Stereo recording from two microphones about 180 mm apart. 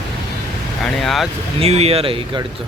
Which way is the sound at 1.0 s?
Centre (ahead or behind).